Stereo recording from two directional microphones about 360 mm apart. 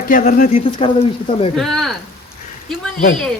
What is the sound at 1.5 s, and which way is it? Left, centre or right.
Speech, centre.